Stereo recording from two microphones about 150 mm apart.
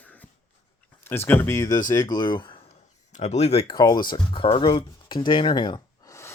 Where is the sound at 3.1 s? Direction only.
50° left (ahead or behind).